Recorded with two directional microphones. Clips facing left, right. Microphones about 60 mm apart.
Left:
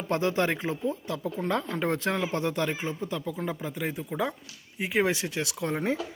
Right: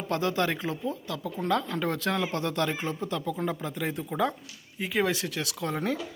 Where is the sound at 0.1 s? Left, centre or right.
Left; by 4.2 s centre.